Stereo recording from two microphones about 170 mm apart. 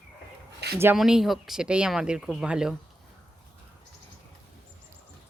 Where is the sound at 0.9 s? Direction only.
Centre (ahead or behind).